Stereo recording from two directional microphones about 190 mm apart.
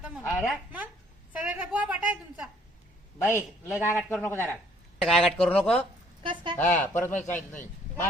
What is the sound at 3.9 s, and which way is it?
A man's voice, 10° left (ahead or behind).